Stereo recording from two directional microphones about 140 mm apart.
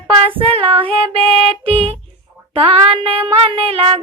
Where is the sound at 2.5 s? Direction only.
40° right (ahead or behind).